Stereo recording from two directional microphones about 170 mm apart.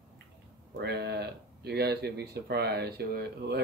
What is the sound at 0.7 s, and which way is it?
Speech, 75° right (ahead or behind).